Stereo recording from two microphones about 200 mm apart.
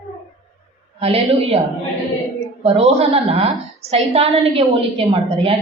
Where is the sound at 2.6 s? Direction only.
30° right (ahead or behind).